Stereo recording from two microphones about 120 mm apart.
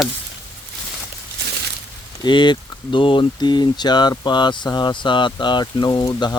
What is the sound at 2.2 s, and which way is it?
Speech, 40° left (ahead or behind).